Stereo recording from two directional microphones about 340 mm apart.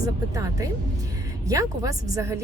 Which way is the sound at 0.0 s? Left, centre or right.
Centre.